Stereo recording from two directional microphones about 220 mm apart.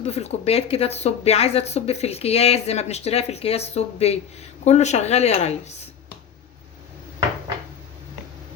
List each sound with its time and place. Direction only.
0.0 s speech: 30° left (ahead or behind)